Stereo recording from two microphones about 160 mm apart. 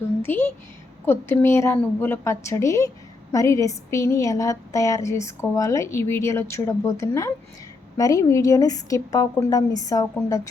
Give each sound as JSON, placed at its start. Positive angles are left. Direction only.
{"t": 0.2, "sound": "a woman's voice", "side_deg": 15}